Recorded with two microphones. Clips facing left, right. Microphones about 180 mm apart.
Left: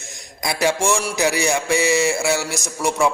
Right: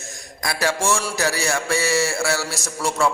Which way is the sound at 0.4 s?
20° left (ahead or behind).